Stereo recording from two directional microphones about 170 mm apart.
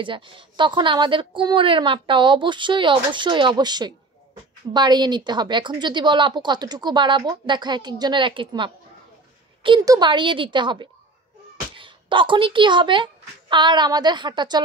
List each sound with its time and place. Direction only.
0.0 s a woman's voice: 30° right (ahead or behind)